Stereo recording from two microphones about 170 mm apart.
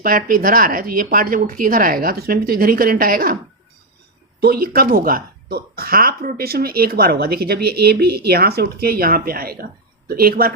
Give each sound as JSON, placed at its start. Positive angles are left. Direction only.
{"t": 0.0, "sound": "speech", "side_deg": -55}
{"t": 4.4, "sound": "speech", "side_deg": -65}